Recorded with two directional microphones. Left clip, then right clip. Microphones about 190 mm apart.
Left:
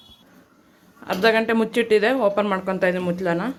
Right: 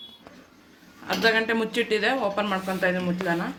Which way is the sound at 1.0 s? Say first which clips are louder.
Left 3 dB; 55° left (ahead or behind).